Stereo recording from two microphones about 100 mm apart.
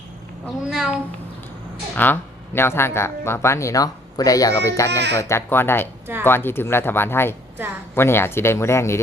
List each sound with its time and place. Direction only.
0.4 s a child's voice: 5° right (ahead or behind)
2.0 s speech: 20° left (ahead or behind)
5.5 s speech: 20° left (ahead or behind)